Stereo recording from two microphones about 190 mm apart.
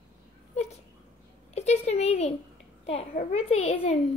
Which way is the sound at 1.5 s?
35° left (ahead or behind).